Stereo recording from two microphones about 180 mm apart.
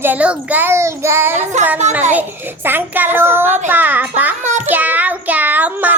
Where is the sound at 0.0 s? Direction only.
10° right (ahead or behind).